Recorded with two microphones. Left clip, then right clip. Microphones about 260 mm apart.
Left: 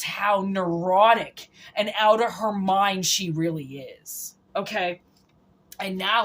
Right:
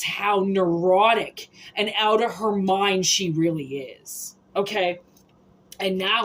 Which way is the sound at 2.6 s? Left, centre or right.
Left.